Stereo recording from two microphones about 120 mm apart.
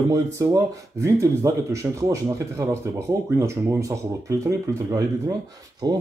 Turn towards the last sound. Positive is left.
turn(degrees=-35)  # may be behind; listen again after turning